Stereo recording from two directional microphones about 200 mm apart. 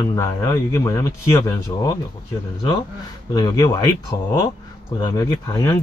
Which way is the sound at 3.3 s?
20° left (ahead or behind).